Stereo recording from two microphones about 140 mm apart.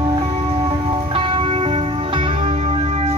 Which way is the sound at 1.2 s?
40° right (ahead or behind).